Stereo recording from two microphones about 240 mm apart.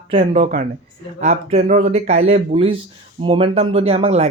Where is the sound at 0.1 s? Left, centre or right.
Right.